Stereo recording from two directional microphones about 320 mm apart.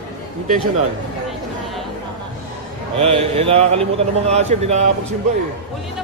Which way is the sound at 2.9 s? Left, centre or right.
Centre.